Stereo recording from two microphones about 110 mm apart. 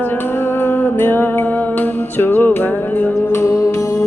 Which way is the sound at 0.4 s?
20° left (ahead or behind).